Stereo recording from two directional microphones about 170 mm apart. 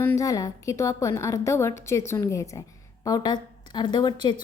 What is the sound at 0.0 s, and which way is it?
A woman's voice, 15° left (ahead or behind).